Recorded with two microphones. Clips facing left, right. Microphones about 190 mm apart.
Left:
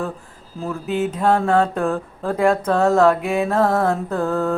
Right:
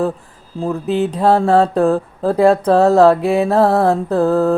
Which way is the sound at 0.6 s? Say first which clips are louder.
Right 5 dB; 35° right (ahead or behind).